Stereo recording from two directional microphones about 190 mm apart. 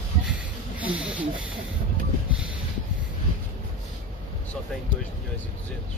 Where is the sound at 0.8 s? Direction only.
5° right (ahead or behind).